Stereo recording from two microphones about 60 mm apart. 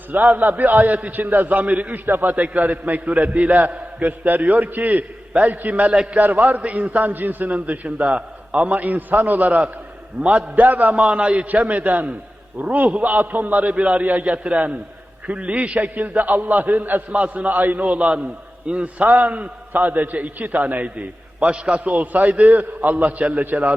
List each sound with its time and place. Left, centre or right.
0.1 s a man's voice: right